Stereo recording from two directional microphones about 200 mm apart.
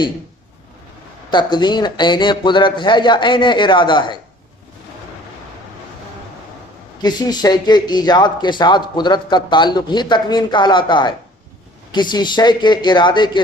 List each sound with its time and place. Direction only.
1.3 s speech: 20° left (ahead or behind)
7.0 s speech: 20° left (ahead or behind)